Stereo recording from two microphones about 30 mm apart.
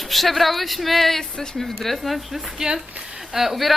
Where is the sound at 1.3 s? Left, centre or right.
Left.